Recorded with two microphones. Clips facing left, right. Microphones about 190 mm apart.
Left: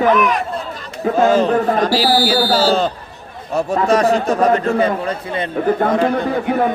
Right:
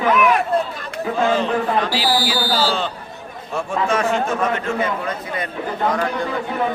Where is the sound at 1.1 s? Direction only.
40° left (ahead or behind); by 6.3 s 20° left (ahead or behind).